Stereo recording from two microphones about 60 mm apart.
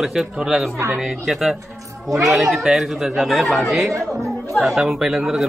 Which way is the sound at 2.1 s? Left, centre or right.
Right.